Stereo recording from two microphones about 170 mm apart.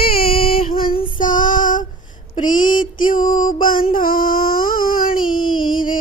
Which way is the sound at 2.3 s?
50° left (ahead or behind).